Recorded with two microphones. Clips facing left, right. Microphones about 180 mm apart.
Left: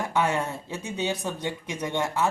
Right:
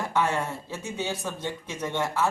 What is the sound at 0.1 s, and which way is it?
Speech, 15° left (ahead or behind).